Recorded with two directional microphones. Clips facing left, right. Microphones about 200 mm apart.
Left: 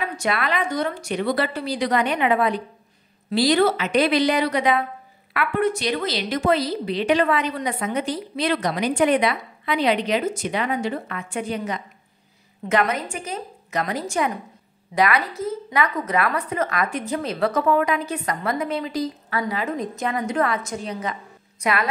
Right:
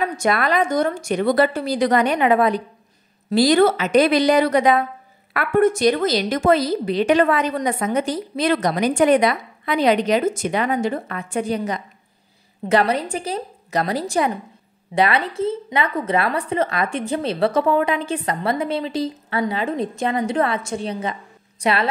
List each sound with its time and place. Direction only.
0.0 s a woman's voice: 45° right (ahead or behind)